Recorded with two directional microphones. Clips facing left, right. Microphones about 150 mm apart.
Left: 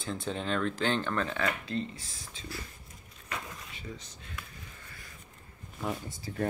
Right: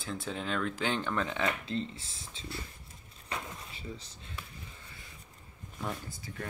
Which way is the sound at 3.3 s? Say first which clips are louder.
Even; 30° right (ahead or behind).